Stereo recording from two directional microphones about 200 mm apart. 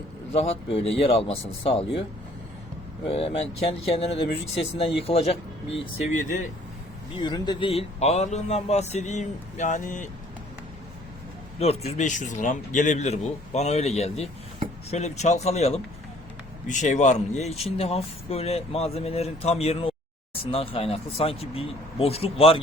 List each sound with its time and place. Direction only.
0.3 s speech: 30° left (ahead or behind)
3.1 s speech: 30° left (ahead or behind)
7.2 s speech: 20° left (ahead or behind); by 10.1 s 40° left (ahead or behind)
11.9 s speech: 35° left (ahead or behind)